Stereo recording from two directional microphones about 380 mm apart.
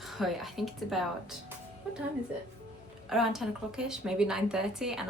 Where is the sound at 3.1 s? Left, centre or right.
Centre.